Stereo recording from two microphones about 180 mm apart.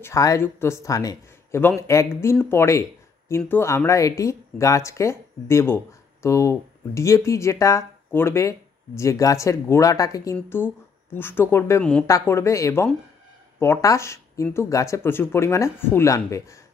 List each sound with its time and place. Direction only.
0.0 s speech: 15° left (ahead or behind)